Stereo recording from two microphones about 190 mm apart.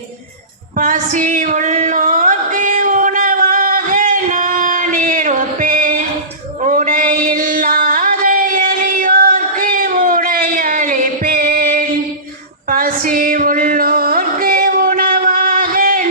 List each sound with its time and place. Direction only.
0.8 s music: 40° right (ahead or behind)
6.7 s a sound: 45° right (ahead or behind)
12.7 s music: 45° right (ahead or behind)